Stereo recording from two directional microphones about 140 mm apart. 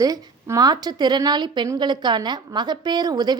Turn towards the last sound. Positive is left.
turn(degrees=-30)  # may be behind; listen again after turning